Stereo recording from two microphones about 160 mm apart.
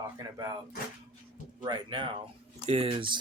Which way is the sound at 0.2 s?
25° right (ahead or behind).